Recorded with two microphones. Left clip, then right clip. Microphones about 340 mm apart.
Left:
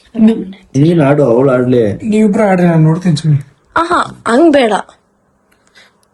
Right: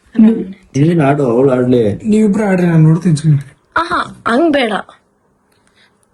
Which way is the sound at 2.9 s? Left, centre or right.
Centre.